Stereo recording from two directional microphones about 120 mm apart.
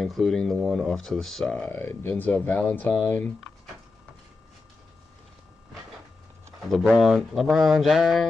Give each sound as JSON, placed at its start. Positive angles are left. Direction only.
{"t": 0.0, "sound": "speech", "side_deg": 0}
{"t": 6.7, "sound": "speech", "side_deg": 0}